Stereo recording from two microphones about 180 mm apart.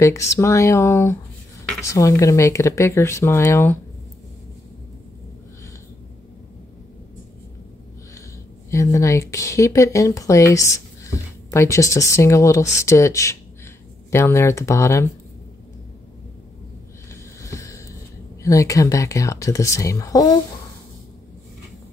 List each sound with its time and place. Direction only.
0.0 s speech: 15° left (ahead or behind)
8.6 s speech: 15° left (ahead or behind)
17.1 s a sound: 15° left (ahead or behind)
18.4 s speech: 15° left (ahead or behind)